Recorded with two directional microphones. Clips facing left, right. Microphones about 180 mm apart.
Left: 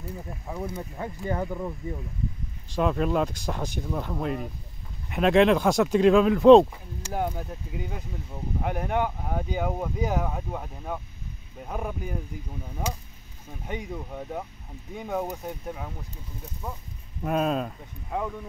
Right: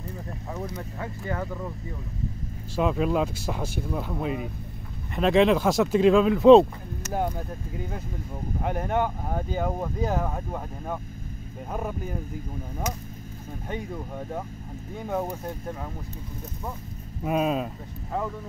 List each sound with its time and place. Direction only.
0.9 s speech: 20° left (ahead or behind)
2.7 s speech: centre (ahead or behind)
13.7 s speech: 5° left (ahead or behind)
17.2 s speech: 5° right (ahead or behind)